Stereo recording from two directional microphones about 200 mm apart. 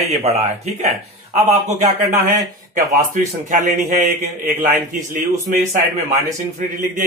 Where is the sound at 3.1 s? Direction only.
35° right (ahead or behind).